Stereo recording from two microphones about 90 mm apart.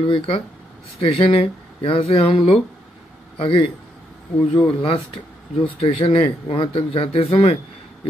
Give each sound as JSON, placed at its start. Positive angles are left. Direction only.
{"t": 0.0, "sound": "a man's voice", "side_deg": 80}